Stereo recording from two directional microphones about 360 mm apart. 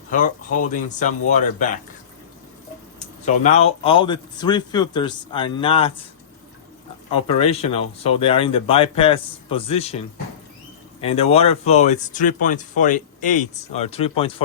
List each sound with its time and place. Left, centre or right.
0.1 s speech: left
3.2 s speech: centre
7.1 s speech: centre
11.0 s speech: centre